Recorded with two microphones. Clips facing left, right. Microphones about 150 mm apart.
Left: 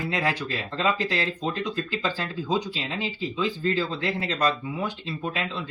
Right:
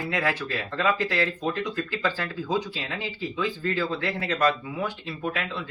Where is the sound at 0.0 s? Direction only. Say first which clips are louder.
Even; 20° left (ahead or behind).